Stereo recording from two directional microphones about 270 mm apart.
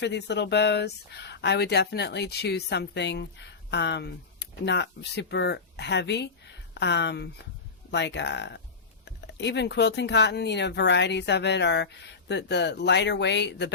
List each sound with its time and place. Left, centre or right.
0.0 s speech: left